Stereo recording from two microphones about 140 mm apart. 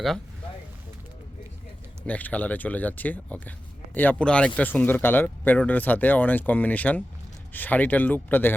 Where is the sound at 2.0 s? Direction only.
10° left (ahead or behind).